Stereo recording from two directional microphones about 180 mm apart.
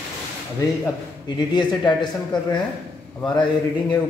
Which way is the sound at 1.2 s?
25° left (ahead or behind).